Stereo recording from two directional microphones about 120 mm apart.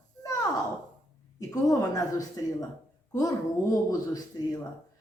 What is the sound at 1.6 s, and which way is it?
A woman's voice, 30° left (ahead or behind).